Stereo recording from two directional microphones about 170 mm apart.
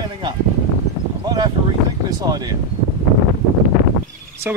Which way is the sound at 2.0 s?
25° right (ahead or behind).